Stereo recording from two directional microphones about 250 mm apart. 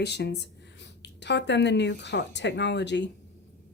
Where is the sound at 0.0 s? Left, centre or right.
Left.